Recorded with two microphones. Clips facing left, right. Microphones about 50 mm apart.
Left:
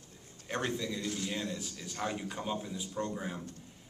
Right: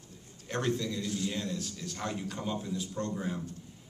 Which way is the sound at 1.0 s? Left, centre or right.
Left.